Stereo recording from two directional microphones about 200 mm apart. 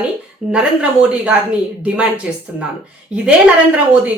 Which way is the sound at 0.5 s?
5° right (ahead or behind).